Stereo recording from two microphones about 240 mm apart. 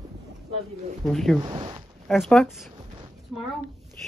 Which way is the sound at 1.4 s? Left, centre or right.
Centre.